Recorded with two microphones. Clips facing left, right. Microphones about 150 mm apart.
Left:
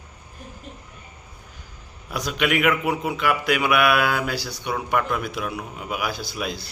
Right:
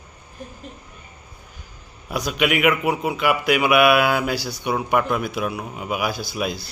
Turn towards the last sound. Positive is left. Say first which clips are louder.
# right 3 dB
turn(degrees=-5)  # may be behind; listen again after turning